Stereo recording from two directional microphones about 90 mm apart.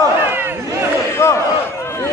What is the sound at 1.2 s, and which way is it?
Battle cry, 30° left (ahead or behind).